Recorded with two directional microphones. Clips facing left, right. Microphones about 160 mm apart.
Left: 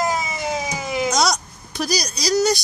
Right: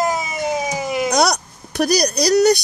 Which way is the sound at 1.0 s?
60° right (ahead or behind).